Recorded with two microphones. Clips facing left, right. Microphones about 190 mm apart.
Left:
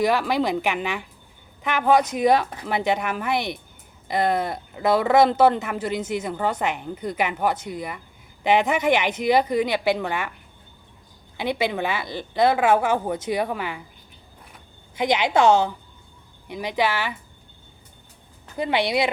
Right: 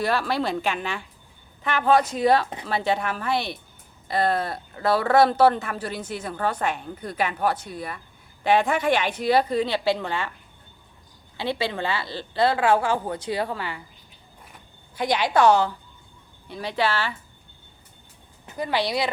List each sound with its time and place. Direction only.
0.0 s speech: 15° left (ahead or behind)
11.3 s speech: 15° left (ahead or behind)
14.9 s a woman's voice: 20° left (ahead or behind)
18.5 s a woman's voice: 20° left (ahead or behind)